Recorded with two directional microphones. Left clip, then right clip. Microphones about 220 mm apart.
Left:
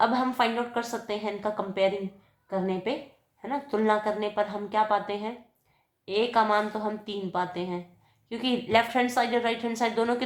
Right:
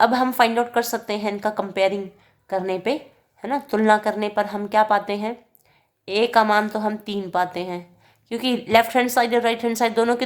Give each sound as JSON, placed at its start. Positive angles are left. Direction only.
{"t": 0.0, "sound": "a woman's voice", "side_deg": -35}